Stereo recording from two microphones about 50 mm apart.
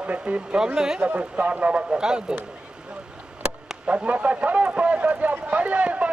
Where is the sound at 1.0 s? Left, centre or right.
Right.